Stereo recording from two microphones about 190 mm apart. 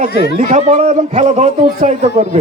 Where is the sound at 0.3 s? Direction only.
40° right (ahead or behind).